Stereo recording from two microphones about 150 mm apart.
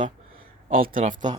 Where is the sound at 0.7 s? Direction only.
65° right (ahead or behind).